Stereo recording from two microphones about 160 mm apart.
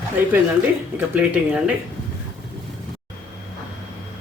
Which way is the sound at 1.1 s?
5° right (ahead or behind).